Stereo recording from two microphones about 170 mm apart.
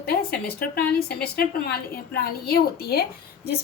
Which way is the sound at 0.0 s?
65° left (ahead or behind).